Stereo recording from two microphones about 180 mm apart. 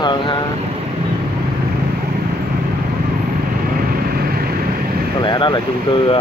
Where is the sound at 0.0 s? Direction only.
25° left (ahead or behind).